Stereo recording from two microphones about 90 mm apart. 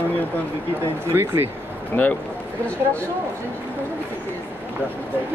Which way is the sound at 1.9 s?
25° left (ahead or behind).